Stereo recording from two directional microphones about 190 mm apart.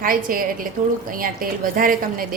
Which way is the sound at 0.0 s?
45° right (ahead or behind).